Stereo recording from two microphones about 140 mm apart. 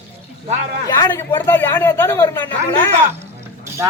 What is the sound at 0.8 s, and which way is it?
A man's voice, 25° left (ahead or behind).